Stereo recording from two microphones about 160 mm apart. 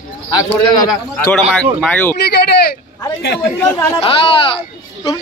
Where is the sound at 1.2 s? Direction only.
5° left (ahead or behind).